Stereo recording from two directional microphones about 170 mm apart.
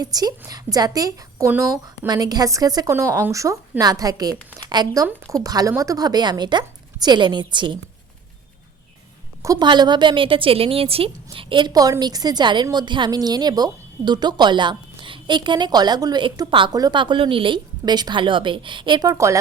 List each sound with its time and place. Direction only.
0.0 s a woman's voice: 20° right (ahead or behind)
9.4 s a woman's voice: 20° right (ahead or behind)